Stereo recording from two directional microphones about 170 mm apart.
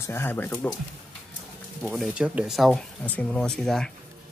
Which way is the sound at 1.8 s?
Centre (ahead or behind).